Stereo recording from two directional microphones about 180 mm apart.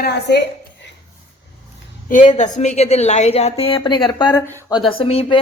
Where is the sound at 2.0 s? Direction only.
45° left (ahead or behind).